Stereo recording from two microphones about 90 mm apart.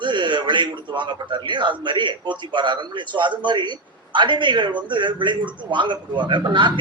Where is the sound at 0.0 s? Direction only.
60° right (ahead or behind).